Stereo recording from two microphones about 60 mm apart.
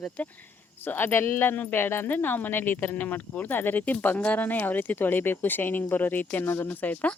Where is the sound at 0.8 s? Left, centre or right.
Left.